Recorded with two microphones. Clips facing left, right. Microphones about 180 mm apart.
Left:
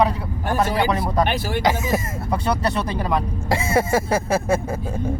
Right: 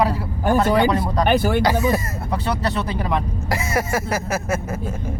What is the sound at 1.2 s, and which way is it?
Speech, 50° right (ahead or behind).